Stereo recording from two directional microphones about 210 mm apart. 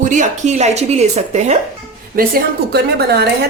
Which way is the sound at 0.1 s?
35° right (ahead or behind).